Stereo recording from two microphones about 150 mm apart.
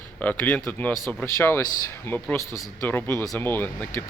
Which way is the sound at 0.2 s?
10° left (ahead or behind).